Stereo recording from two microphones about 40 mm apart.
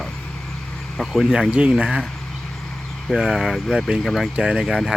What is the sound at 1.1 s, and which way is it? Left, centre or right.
Speech, centre.